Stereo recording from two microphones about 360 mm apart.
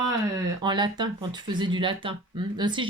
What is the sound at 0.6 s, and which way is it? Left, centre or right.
Speech, centre.